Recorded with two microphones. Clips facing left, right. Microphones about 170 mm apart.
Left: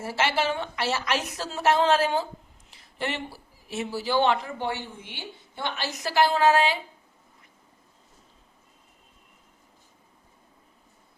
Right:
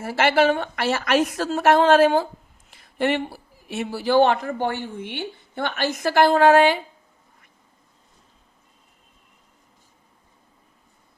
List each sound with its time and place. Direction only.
0.0 s a woman's voice: 60° right (ahead or behind)